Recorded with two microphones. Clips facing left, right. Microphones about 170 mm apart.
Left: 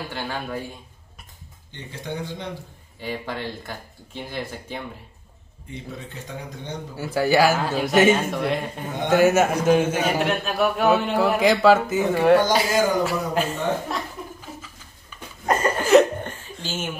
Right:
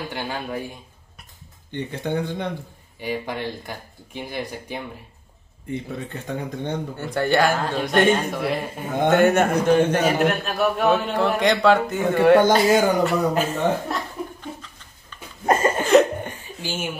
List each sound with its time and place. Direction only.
0.1 s a man's voice: 15° right (ahead or behind)
1.7 s speech: 55° right (ahead or behind)
3.0 s speech: 15° right (ahead or behind)
6.2 s speech: 55° right (ahead or behind)
7.0 s a man's voice: 5° left (ahead or behind)
15.8 s cough: centre (ahead or behind)
16.2 s chuckle: 10° right (ahead or behind)